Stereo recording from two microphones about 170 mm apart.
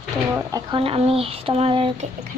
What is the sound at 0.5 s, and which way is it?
Speech, 30° right (ahead or behind).